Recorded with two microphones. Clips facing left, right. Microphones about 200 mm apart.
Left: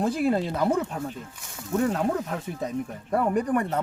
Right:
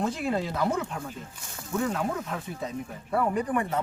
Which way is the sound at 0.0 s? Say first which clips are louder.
Left 4 dB; 35° left (ahead or behind).